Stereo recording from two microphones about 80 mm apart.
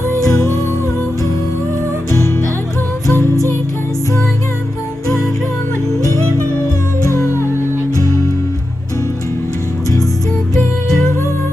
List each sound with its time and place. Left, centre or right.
0.2 s music: left
2.0 s music: left
7.1 s music: left